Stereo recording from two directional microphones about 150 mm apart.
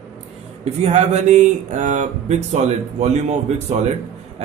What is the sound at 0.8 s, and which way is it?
Speech, 50° right (ahead or behind).